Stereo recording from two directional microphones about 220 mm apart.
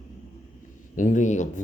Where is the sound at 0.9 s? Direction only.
35° left (ahead or behind).